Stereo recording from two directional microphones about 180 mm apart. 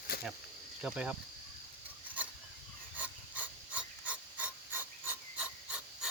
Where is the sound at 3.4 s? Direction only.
10° right (ahead or behind).